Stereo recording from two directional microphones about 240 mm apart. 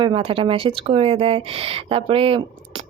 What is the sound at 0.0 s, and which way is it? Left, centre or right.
A woman's voice, right.